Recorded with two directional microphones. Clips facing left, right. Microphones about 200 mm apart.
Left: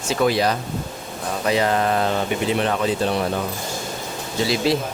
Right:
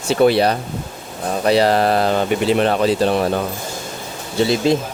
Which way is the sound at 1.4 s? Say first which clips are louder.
Right 5 dB; 35° right (ahead or behind).